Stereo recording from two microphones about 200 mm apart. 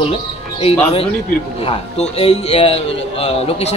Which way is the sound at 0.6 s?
30° left (ahead or behind).